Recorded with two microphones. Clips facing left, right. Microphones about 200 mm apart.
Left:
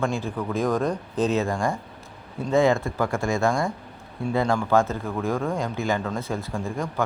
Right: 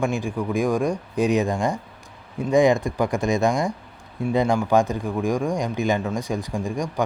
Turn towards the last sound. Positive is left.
turn(degrees=-15)  # may be behind; listen again after turning